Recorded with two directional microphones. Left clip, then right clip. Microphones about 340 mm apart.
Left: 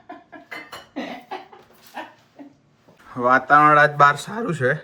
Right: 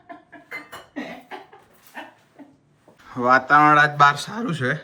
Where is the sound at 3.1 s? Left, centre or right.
Centre.